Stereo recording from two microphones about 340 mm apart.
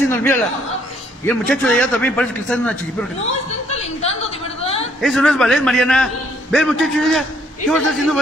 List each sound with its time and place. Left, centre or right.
0.1 s a man's voice: centre
3.7 s a sound: centre
5.0 s a man's voice: centre